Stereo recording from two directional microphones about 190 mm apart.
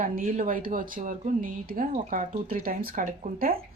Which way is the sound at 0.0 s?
45° right (ahead or behind).